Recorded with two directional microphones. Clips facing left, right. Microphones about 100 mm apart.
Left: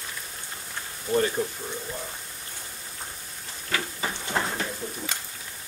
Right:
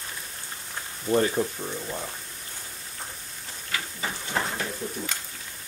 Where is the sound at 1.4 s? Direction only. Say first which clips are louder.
Right 2 dB; 5° right (ahead or behind).